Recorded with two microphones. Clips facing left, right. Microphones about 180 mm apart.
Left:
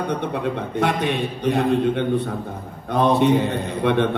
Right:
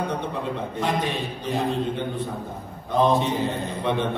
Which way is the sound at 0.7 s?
70° left (ahead or behind).